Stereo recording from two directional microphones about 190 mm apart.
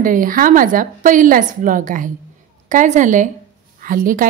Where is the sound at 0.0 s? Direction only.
45° right (ahead or behind).